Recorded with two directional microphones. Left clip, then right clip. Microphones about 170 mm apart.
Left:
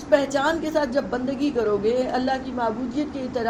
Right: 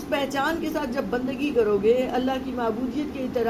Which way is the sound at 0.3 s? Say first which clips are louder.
Left 4 dB; 35° left (ahead or behind).